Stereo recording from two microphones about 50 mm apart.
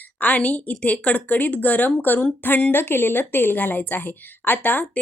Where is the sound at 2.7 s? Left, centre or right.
Left.